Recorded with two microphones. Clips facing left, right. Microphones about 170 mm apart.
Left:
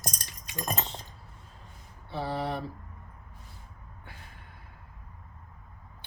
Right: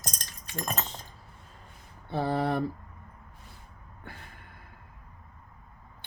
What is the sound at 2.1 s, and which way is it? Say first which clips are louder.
Speech: right 4 dB; 50° right (ahead or behind).